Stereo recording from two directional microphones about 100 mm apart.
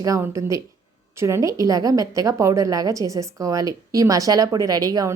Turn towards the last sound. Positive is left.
turn(degrees=-35)  # may be behind; listen again after turning